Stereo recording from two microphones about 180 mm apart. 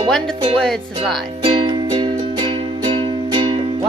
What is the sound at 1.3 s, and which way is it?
Music, 30° right (ahead or behind).